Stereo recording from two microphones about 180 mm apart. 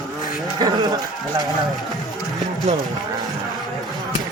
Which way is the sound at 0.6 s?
20° right (ahead or behind).